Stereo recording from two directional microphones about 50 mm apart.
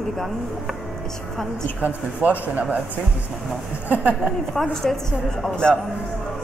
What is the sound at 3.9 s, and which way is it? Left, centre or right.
Speech, right.